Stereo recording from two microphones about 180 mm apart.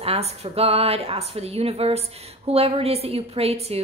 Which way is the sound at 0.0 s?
35° right (ahead or behind).